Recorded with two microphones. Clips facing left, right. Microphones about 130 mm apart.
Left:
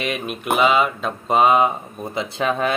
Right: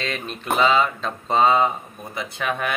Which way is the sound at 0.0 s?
15° left (ahead or behind).